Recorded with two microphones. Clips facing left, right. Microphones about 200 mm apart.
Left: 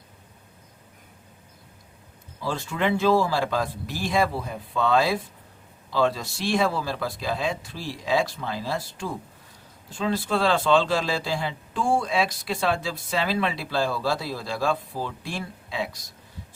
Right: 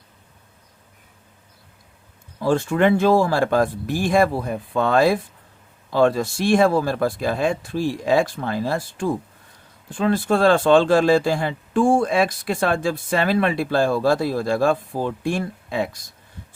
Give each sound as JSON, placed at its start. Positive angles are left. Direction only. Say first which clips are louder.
{"t": 2.4, "sound": "speech", "louder": "right 9 dB", "side_deg": -50}